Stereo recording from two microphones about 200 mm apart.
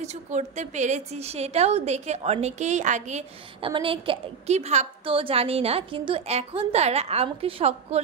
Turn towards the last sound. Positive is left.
turn(degrees=-30)  # may be behind; listen again after turning